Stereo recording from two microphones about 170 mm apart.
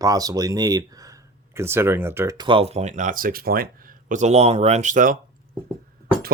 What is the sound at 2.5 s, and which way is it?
Speech, 35° right (ahead or behind).